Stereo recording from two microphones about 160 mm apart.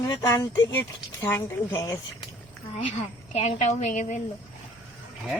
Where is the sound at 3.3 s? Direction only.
45° left (ahead or behind).